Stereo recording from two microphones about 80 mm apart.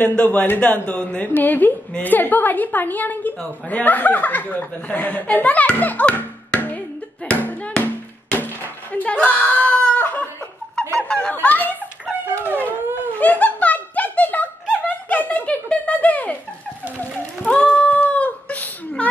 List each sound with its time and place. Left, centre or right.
0.0 s a woman's voice: centre
7.2 s hands: centre
8.9 s a sound: centre
10.8 s snicker: centre
11.3 s a woman's voice: left
12.4 s howl: left
13.2 s a sound: left
14.9 s giggle: left
17.0 s a sound: centre